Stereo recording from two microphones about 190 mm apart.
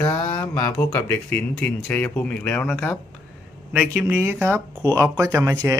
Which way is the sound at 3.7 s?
5° right (ahead or behind).